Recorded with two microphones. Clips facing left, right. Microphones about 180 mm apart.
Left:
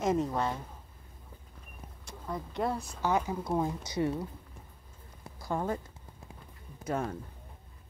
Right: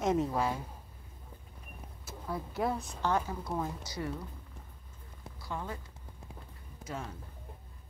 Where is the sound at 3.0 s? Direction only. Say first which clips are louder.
Left 3 dB; 10° left (ahead or behind).